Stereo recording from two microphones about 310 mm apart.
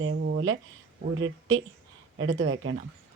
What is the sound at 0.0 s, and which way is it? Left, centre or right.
Speech, right.